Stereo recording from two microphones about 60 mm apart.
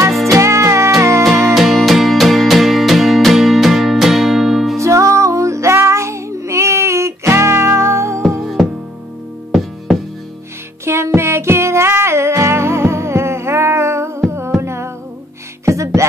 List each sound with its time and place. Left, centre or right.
0.3 s music: right
1.5 s music: centre
4.7 s child singing: right
8.4 s music: centre
11.1 s music: right